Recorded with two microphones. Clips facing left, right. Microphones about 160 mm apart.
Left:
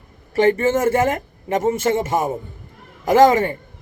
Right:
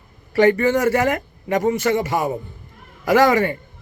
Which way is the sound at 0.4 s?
25° left (ahead or behind).